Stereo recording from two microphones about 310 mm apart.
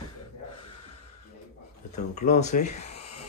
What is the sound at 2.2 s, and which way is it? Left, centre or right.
Speech, left.